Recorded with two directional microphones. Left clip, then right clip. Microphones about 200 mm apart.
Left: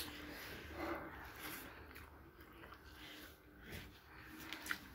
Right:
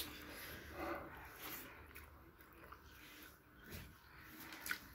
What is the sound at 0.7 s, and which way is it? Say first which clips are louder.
Dog: left 1 dB; 5° right (ahead or behind).